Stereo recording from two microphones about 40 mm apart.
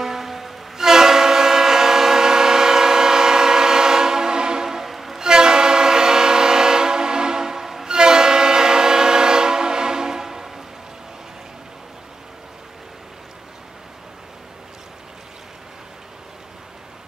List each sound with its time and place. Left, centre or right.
0.0 s train: centre
5.2 s train: centre